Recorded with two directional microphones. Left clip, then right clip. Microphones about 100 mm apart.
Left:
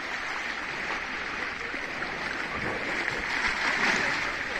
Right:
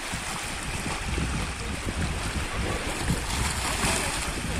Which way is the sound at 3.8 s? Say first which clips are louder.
Left 1 dB; 55° right (ahead or behind).